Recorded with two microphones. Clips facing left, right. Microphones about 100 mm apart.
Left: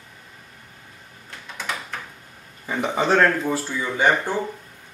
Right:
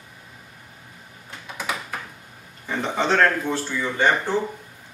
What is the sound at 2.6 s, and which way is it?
Speech, 10° left (ahead or behind).